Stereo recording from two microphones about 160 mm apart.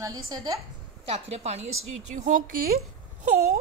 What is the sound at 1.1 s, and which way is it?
A woman's voice, 40° right (ahead or behind).